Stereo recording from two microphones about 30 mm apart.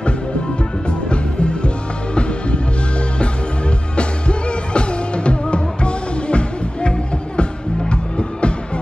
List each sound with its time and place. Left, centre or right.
0.8 s music: left
3.9 s music: left